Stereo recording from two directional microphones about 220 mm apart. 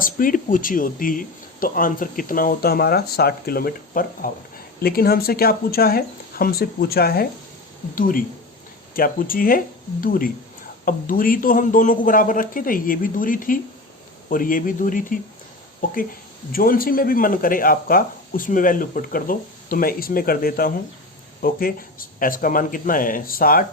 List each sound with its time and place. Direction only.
0.0 s speech: 40° left (ahead or behind)